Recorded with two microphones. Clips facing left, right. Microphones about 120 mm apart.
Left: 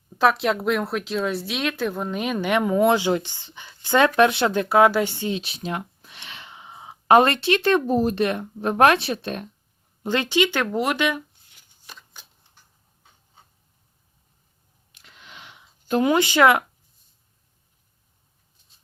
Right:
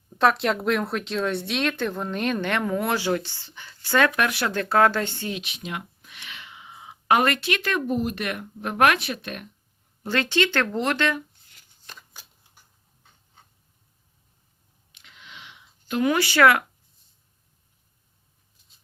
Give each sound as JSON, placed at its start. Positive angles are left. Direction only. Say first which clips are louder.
{"t": 0.2, "sound": "speech", "louder": "left 1 dB", "side_deg": 0}
{"t": 5.3, "sound": "speech", "louder": "left 5 dB", "side_deg": 35}
{"t": 10.0, "sound": "speech", "louder": "left 2 dB", "side_deg": 15}
{"t": 11.9, "sound": "a sound", "louder": "even", "side_deg": -5}
{"t": 14.9, "sound": "a sound", "louder": "left 1 dB", "side_deg": 40}
{"t": 16.0, "sound": "speech", "louder": "left 1 dB", "side_deg": 20}